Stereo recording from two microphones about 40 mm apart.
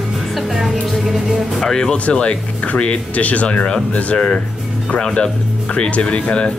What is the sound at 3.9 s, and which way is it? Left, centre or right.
Speech, left.